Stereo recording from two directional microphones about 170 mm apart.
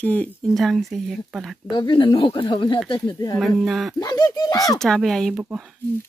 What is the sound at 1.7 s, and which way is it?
Speech, 25° left (ahead or behind).